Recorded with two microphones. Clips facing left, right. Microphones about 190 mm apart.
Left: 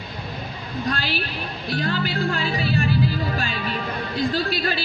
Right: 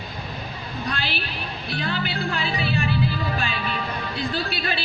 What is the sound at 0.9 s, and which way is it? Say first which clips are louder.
A woman's voice: left 4 dB; 45° left (ahead or behind).